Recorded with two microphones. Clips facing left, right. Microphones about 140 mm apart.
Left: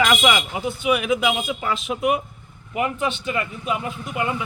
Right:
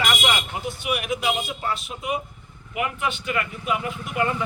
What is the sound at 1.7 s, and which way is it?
Speech, 85° left.